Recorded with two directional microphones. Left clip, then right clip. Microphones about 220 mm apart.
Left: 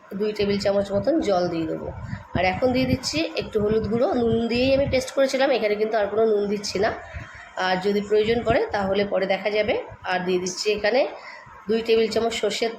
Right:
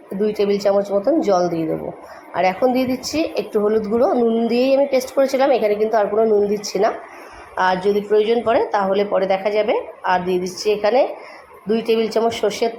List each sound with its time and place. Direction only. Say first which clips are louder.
0.2 s a woman's voice: right 5 dB; 15° right (ahead or behind)